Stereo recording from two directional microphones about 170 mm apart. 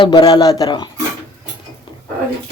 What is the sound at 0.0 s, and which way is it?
Speech, 25° left (ahead or behind).